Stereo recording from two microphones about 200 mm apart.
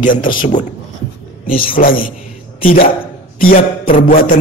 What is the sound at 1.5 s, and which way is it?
Speech, 45° left (ahead or behind).